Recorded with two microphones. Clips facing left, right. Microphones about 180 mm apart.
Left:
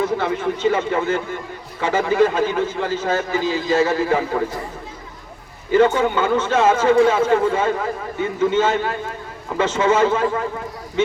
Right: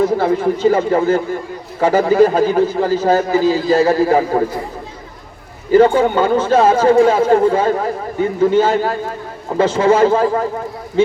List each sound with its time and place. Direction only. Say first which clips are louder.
0.0 s a man's voice: right 6 dB; 35° right (ahead or behind)
5.7 s a man's voice: right 5 dB; 35° right (ahead or behind)